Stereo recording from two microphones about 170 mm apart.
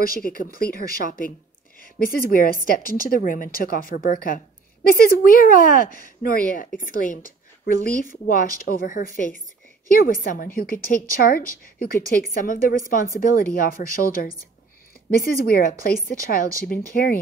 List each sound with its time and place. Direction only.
0.0 s a woman's voice: 55° left (ahead or behind)
15.3 s speech: 60° left (ahead or behind)